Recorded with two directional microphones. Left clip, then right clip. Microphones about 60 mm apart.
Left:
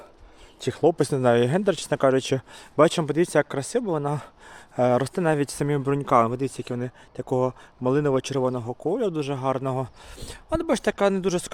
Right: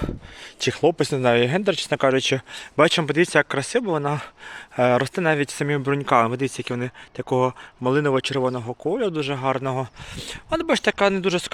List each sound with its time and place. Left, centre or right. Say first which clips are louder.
0.8 s speech: even; left
1.0 s speech: right 1 dB; left
1.9 s speech: right 2 dB; left; by 3.8 s centre
3.8 s speech: right 3 dB; centre; by 5.6 s left
5.6 s speech: right 2 dB; left
6.2 s speech: right 3 dB; centre
7.3 s speech: right 3 dB; centre
7.9 s speech: right 2 dB; left